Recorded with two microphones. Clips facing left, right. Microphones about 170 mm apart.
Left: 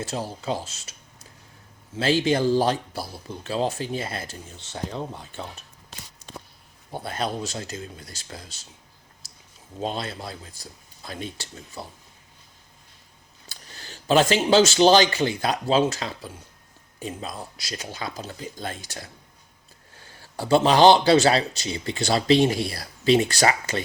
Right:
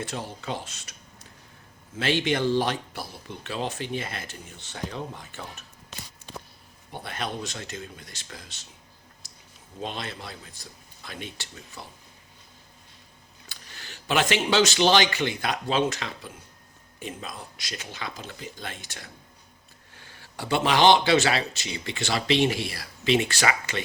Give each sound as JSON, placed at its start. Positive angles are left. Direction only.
{"t": 0.1, "sound": "a man's voice", "side_deg": 35}
{"t": 2.0, "sound": "a man's voice", "side_deg": 35}
{"t": 6.9, "sound": "a man's voice", "side_deg": 35}
{"t": 9.8, "sound": "a man's voice", "side_deg": 35}
{"t": 13.7, "sound": "a man's voice", "side_deg": 35}
{"t": 20.3, "sound": "a man's voice", "side_deg": 35}